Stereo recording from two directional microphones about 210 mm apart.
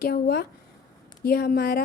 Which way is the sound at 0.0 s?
50° left (ahead or behind).